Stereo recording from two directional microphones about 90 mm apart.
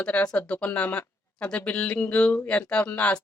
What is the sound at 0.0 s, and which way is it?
Speech, 15° left (ahead or behind).